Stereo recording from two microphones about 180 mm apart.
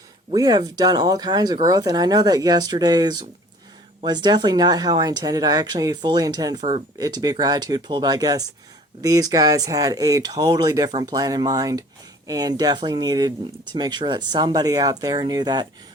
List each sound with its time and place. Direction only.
0.3 s speech: 20° right (ahead or behind)